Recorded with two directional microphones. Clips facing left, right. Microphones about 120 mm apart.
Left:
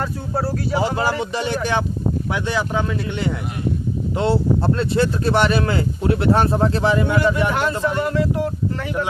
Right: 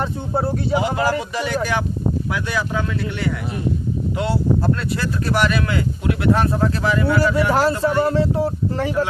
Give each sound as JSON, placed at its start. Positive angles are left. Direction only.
{"t": 0.0, "sound": "speech", "side_deg": -25}
{"t": 0.8, "sound": "speech", "side_deg": 25}
{"t": 7.5, "sound": "speech", "side_deg": -35}